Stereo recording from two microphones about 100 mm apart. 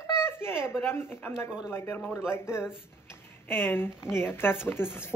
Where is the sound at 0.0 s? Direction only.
25° left (ahead or behind).